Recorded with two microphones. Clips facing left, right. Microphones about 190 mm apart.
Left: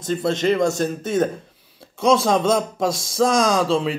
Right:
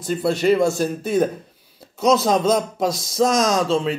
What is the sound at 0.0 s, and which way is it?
A man's voice, 5° right (ahead or behind).